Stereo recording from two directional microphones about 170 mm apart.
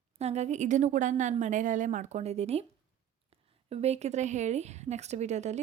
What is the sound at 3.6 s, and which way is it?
A woman's voice, 40° right (ahead or behind).